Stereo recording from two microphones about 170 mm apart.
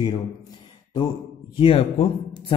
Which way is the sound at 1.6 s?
30° left (ahead or behind).